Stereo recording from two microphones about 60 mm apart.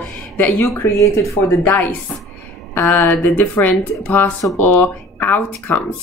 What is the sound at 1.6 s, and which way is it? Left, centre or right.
Speech, left.